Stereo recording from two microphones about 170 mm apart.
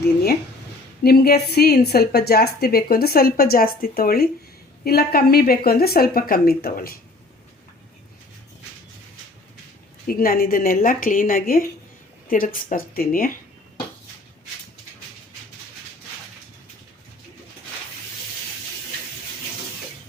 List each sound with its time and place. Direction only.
1.0 s a woman's voice: 65° left (ahead or behind)
10.1 s a woman's voice: 60° left (ahead or behind)